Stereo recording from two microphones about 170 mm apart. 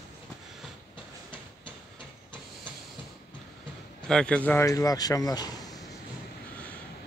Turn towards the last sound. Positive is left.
turn(degrees=20)  # may be behind; listen again after turning